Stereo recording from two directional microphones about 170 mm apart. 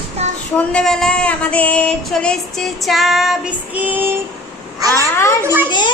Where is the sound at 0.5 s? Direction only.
5° left (ahead or behind); by 4.1 s 10° right (ahead or behind).